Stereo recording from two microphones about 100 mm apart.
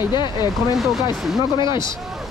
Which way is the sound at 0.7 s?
Centre (ahead or behind).